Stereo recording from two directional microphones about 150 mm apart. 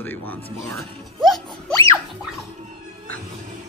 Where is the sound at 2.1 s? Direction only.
Centre (ahead or behind).